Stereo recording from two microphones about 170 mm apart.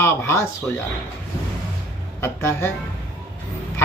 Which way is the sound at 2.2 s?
15° left (ahead or behind).